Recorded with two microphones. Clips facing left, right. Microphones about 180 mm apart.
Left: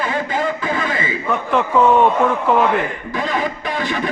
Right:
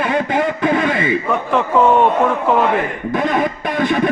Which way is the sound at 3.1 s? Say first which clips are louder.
Right 6 dB; 55° right (ahead or behind).